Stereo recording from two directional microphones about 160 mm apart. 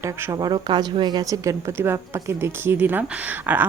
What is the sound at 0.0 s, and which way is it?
A woman's voice, 20° right (ahead or behind).